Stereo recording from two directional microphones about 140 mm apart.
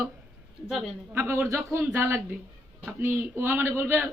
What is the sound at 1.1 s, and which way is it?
A man's voice, 15° right (ahead or behind).